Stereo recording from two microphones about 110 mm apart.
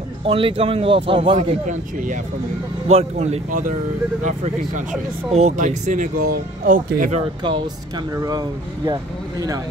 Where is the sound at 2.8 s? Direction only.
75° right (ahead or behind).